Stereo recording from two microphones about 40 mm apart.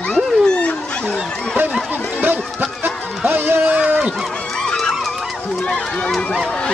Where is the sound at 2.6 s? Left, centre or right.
Right.